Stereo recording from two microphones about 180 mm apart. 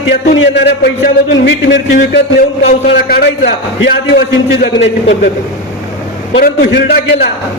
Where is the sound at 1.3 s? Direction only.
90° left.